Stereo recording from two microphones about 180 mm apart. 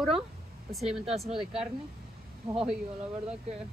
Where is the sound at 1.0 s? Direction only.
35° right (ahead or behind).